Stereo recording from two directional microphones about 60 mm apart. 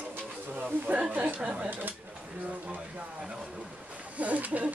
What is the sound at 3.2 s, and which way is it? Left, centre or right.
Vehicle, centre.